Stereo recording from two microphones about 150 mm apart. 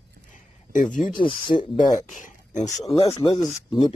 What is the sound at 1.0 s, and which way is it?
Speech, 30° left (ahead or behind).